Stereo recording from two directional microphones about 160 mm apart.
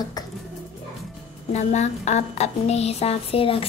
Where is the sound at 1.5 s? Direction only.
45° left (ahead or behind).